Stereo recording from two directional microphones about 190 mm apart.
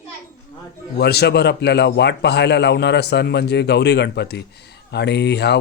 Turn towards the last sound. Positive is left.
turn(degrees=60)  # may be behind; listen again after turning